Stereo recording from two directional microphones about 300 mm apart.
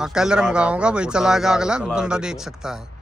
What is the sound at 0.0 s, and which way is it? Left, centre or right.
Speech, centre.